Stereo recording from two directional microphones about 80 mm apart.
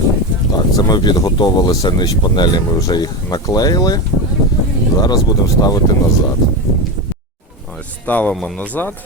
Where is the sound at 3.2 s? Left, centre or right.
Left.